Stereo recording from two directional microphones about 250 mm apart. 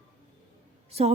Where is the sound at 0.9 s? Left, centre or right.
Right.